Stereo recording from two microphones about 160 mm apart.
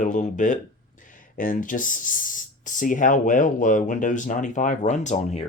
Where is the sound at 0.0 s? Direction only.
50° left (ahead or behind).